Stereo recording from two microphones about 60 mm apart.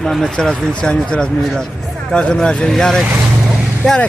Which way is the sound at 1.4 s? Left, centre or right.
Centre.